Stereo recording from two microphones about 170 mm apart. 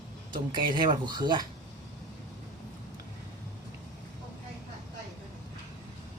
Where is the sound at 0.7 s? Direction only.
25° right (ahead or behind).